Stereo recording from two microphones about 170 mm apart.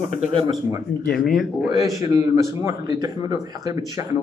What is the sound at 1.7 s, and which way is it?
Speech, 20° right (ahead or behind).